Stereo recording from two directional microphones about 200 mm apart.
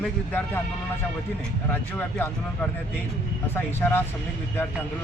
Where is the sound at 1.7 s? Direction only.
10° left (ahead or behind).